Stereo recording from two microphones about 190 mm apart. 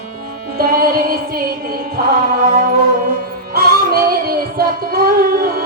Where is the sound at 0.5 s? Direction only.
50° right (ahead or behind).